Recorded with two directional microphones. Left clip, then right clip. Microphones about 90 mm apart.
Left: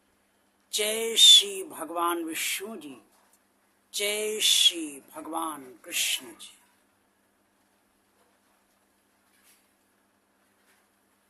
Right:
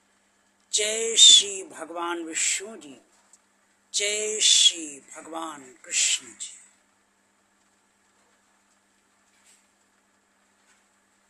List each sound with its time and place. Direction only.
0.7 s speech: 40° left (ahead or behind)